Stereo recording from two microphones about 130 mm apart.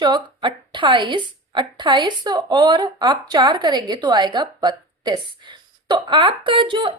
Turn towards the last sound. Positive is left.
turn(degrees=-40)  # may be behind; listen again after turning